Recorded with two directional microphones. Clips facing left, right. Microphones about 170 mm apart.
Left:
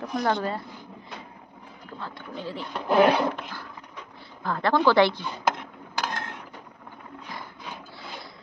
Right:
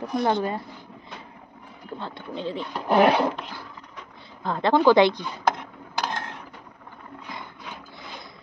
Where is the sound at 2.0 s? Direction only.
25° right (ahead or behind).